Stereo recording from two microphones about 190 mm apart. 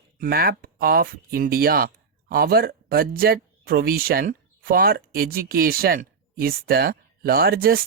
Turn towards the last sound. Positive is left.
turn(degrees=-50)  # may be behind; listen again after turning